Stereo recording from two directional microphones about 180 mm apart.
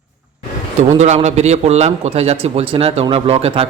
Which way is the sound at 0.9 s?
35° right (ahead or behind).